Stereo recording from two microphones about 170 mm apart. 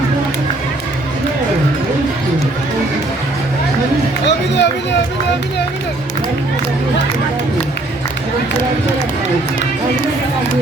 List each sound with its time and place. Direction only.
4.3 s run: 90° left